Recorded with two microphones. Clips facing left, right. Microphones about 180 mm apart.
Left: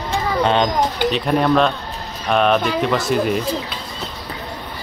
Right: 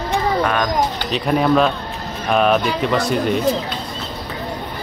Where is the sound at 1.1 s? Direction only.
Centre (ahead or behind).